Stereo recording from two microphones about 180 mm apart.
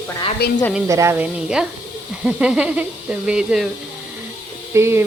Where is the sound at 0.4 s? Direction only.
65° left (ahead or behind).